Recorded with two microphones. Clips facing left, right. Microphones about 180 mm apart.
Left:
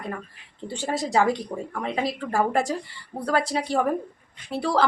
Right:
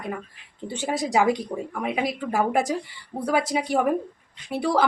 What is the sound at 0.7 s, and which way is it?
A woman's voice, 15° right (ahead or behind).